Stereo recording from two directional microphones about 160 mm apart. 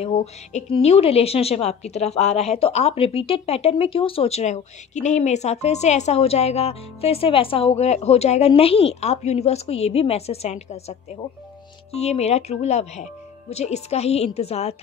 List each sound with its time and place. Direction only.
0.0 s a woman's voice: 40° left (ahead or behind)